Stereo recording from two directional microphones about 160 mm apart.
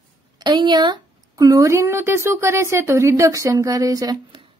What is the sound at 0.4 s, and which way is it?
Speech, 30° right (ahead or behind).